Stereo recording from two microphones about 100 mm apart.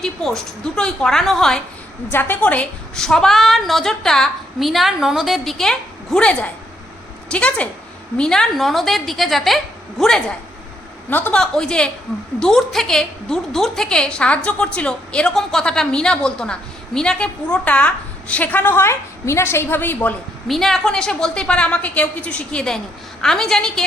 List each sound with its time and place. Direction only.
0.0 s a woman's voice: 5° left (ahead or behind)
2.1 s a woman's voice: 20° left (ahead or behind)
11.1 s a woman's voice: 20° left (ahead or behind)
20.5 s a woman's voice: 5° left (ahead or behind)